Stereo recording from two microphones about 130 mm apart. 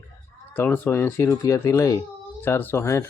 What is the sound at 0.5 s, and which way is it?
Speech, 15° left (ahead or behind).